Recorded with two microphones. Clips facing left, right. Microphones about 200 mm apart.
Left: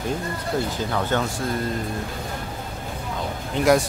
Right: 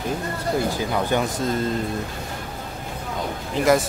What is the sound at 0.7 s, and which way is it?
Speech, 10° right (ahead or behind).